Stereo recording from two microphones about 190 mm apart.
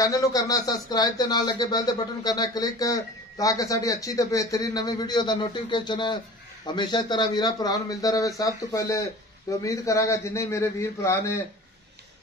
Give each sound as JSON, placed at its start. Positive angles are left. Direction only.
{"t": 0.0, "sound": "a man's voice", "side_deg": 15}